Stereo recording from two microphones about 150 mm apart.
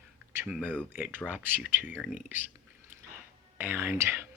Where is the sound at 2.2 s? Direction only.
10° right (ahead or behind).